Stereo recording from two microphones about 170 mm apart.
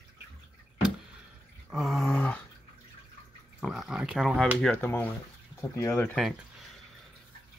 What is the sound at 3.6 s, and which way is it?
Speech, centre (ahead or behind).